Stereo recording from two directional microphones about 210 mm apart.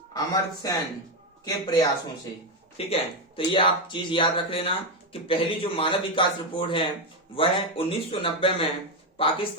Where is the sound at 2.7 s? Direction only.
25° left (ahead or behind).